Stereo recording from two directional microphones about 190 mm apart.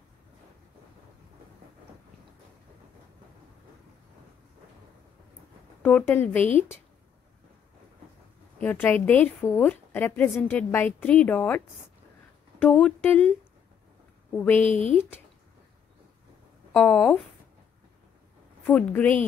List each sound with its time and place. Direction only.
5.8 s a woman's voice: 5° left (ahead or behind)
8.5 s a woman's voice: 10° left (ahead or behind)
14.3 s a woman's voice: 10° left (ahead or behind)
14.7 s speech: 40° left (ahead or behind)
15.0 s a woman's voice: 10° left (ahead or behind)
16.7 s a woman's voice: 5° left (ahead or behind)
18.7 s a woman's voice: 5° left (ahead or behind)